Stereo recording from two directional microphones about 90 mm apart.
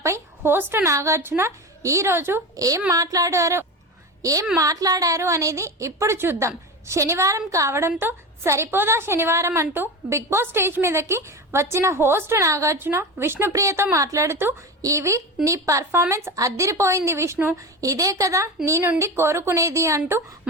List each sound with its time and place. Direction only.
0.0 s a sound: 35° right (ahead or behind)
0.5 s a woman's voice: 30° right (ahead or behind)
2.6 s a woman's voice: 40° right (ahead or behind)